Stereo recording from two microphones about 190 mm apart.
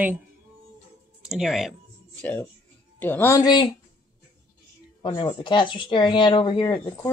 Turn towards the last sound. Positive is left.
turn(degrees=25)  # may be behind; listen again after turning